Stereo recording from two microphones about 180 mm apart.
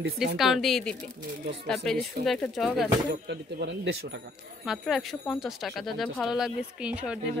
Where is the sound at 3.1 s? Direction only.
70° right (ahead or behind).